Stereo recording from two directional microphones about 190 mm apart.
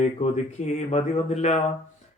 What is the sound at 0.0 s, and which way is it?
Speech, 35° left (ahead or behind).